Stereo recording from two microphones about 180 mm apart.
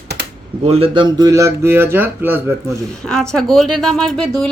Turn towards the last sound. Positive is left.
turn(degrees=5)  # may be behind; listen again after turning